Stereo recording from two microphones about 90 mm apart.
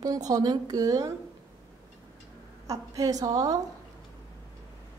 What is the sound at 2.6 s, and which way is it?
Speech, 35° right (ahead or behind).